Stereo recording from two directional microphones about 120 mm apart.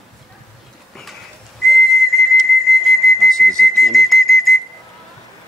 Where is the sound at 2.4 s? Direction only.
Centre (ahead or behind).